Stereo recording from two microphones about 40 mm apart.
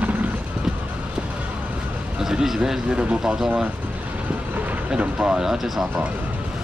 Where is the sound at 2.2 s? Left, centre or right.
Centre.